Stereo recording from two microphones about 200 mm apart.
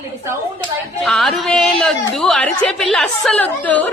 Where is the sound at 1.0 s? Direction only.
Centre (ahead or behind).